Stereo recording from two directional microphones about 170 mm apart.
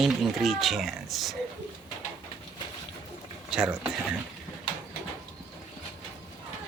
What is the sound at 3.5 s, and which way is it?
Speech, 5° right (ahead or behind).